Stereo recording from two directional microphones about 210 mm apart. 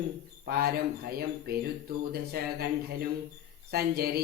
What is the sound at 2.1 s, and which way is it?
Speech, 45° right (ahead or behind).